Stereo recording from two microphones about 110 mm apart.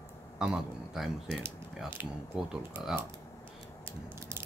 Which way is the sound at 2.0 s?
20° right (ahead or behind).